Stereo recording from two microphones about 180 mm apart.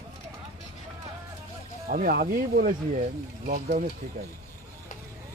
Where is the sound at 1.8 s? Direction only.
55° right (ahead or behind).